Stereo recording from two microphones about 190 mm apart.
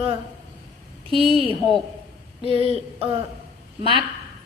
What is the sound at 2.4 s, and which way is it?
Speech, 30° left (ahead or behind).